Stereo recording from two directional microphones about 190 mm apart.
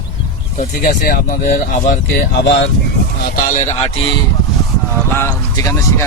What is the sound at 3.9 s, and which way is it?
Speech, 30° left (ahead or behind).